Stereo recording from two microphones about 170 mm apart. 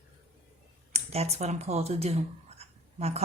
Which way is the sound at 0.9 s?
40° right (ahead or behind).